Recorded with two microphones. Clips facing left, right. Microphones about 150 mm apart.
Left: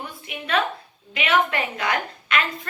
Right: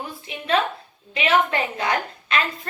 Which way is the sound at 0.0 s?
30° right (ahead or behind).